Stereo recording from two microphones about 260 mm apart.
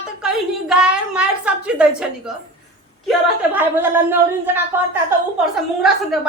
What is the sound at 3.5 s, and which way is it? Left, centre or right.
A woman's voice, centre.